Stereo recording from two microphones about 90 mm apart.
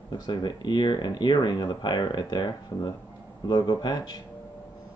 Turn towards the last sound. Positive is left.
turn(degrees=55)  # may be behind; listen again after turning